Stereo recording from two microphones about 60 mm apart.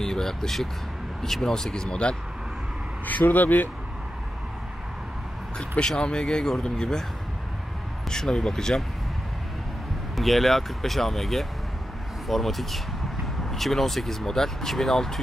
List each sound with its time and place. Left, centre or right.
0.0 s speech: centre
3.1 s speech: left
5.6 s speech: centre
8.1 s speech: centre
10.1 s speech: centre